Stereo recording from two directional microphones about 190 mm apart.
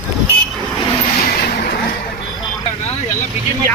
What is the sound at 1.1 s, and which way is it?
Vehicle, 50° left (ahead or behind).